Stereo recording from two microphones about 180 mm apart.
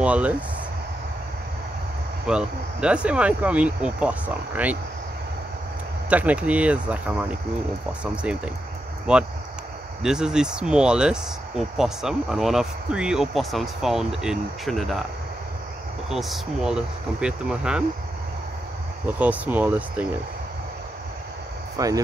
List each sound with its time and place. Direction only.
0.0 s speech: 5° right (ahead or behind)
2.2 s speech: 5° right (ahead or behind)
6.0 s speech: 5° right (ahead or behind)
16.1 s speech: centre (ahead or behind)
19.1 s speech: 10° right (ahead or behind)
21.7 s speech: 20° right (ahead or behind)